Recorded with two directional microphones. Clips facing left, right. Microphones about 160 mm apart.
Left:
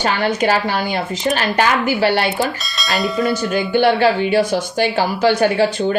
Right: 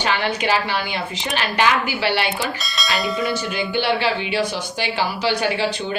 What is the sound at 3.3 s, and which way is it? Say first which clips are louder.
A woman's voice: left 6 dB; 45° left (ahead or behind).